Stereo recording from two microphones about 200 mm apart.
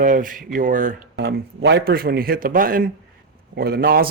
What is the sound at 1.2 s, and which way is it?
Speech, 60° right (ahead or behind).